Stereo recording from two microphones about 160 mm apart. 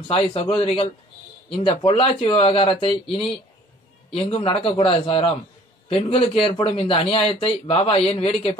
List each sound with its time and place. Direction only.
0.1 s a man's voice: 35° left (ahead or behind)